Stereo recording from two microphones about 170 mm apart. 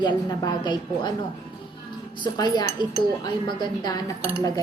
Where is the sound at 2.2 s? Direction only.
25° left (ahead or behind).